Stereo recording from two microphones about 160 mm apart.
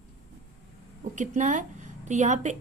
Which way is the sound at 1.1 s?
50° right (ahead or behind).